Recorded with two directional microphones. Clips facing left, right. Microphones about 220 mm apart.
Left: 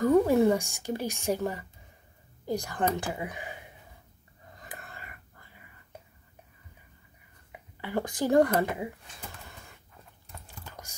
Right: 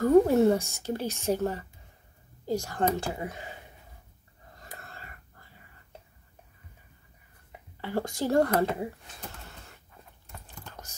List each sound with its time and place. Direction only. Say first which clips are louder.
0.0 s speech: right 2 dB; 15° left (ahead or behind)
4.6 s a sound: left 1 dB; 15° left (ahead or behind)
7.8 s speech: even; 15° left (ahead or behind)
10.6 s computer keyboard: even; 10° left (ahead or behind)